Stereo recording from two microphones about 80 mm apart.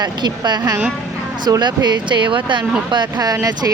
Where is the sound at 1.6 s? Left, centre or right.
Right.